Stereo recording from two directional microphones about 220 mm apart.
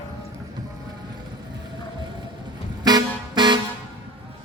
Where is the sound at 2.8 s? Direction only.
20° right (ahead or behind).